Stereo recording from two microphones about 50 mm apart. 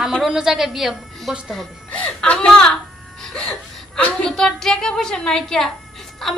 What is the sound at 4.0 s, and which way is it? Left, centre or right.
Speech, left.